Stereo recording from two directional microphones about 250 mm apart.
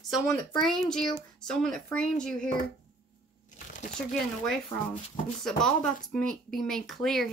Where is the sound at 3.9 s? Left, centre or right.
Centre.